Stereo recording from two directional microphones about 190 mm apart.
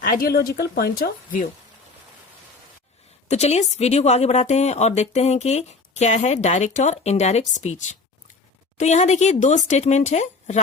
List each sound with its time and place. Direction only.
0.0 s speech: 50° left (ahead or behind)
3.2 s speech: 35° left (ahead or behind)